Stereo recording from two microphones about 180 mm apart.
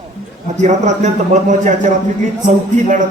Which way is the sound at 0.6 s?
40° right (ahead or behind).